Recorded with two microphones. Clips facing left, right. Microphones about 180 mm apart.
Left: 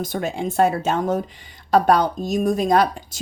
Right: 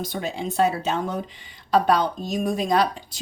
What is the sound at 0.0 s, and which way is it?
A woman's voice, 50° left (ahead or behind).